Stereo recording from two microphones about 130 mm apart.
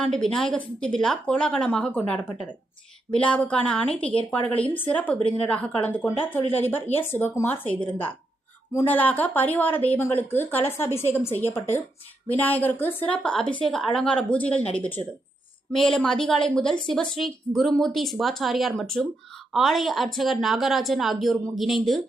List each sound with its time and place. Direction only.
0.0 s a woman's voice: 5° left (ahead or behind)